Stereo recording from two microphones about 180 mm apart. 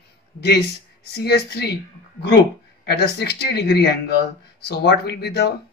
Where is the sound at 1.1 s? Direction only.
65° left (ahead or behind).